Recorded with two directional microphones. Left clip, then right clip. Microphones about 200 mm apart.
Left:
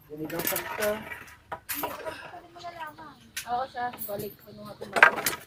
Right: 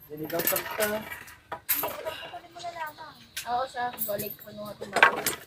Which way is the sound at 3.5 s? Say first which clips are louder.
Right 1 dB; 40° right (ahead or behind).